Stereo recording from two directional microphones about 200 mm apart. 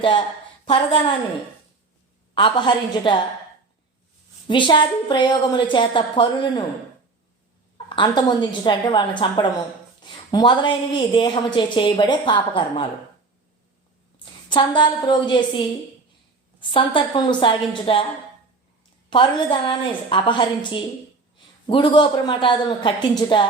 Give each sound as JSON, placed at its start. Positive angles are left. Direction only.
{"t": 0.6, "sound": "a woman's voice", "side_deg": 25}
{"t": 2.3, "sound": "a woman's voice", "side_deg": 25}
{"t": 4.4, "sound": "a woman's voice", "side_deg": 25}
{"t": 7.9, "sound": "a woman's voice", "side_deg": 20}
{"t": 14.5, "sound": "a woman's voice", "side_deg": 25}
{"t": 19.1, "sound": "a woman's voice", "side_deg": 25}